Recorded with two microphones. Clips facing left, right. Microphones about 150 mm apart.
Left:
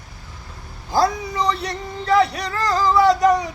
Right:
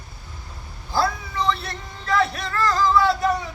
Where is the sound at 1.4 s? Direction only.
40° left (ahead or behind).